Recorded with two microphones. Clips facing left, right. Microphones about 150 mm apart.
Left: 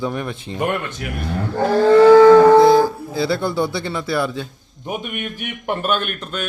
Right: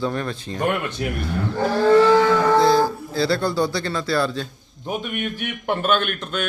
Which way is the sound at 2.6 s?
15° left (ahead or behind).